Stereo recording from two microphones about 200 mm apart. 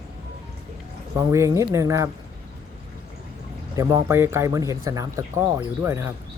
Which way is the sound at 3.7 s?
15° right (ahead or behind).